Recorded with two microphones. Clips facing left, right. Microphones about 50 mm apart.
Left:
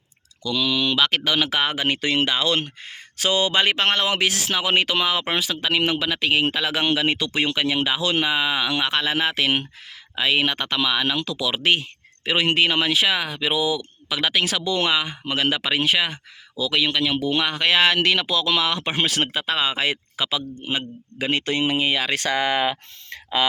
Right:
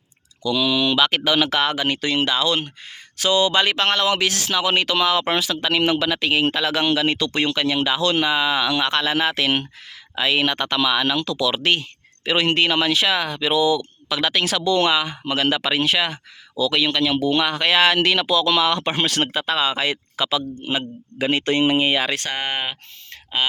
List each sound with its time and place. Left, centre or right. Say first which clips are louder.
0.4 s speech: right 3 dB; centre
1.5 s speech: right 2 dB; centre
5.4 s speech: right 2 dB; centre
19.5 s speech: right 1 dB; centre
20.2 s speech: right 3 dB; centre
21.4 s speech: right 5 dB; right